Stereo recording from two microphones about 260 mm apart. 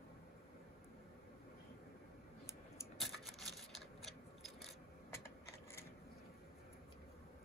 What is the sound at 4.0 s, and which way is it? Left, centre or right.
Mechanisms, centre.